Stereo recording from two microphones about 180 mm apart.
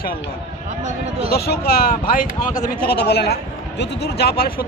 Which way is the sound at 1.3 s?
60° left (ahead or behind).